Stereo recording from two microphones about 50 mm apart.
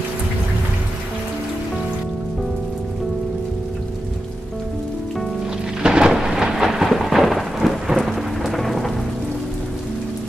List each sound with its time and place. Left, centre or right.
5.8 s thunder: centre